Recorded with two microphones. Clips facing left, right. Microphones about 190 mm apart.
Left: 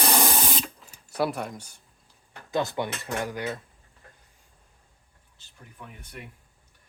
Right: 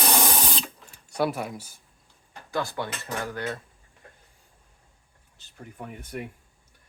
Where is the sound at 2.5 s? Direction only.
20° left (ahead or behind).